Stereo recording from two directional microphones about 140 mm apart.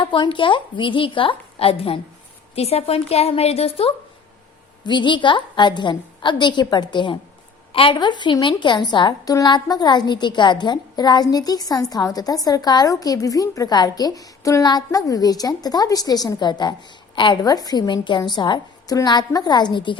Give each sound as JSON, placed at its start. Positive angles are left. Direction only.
{"t": 0.0, "sound": "a woman's voice", "side_deg": 35}
{"t": 4.8, "sound": "a woman's voice", "side_deg": 35}